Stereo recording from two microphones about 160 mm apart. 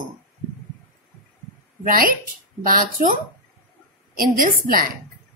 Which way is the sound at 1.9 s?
60° right (ahead or behind).